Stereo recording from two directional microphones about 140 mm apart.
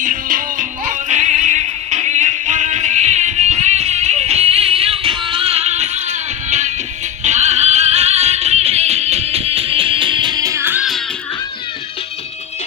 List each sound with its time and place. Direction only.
0.0 s music: 70° right (ahead or behind); by 10.8 s 15° right (ahead or behind)